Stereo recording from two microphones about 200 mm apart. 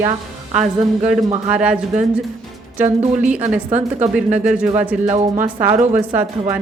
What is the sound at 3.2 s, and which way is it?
A woman's voice, 5° right (ahead or behind).